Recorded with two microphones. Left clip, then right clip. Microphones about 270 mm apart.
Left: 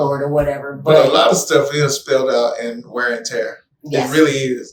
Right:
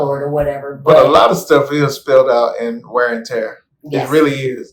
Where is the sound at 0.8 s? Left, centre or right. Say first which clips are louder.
Right 3 dB; centre.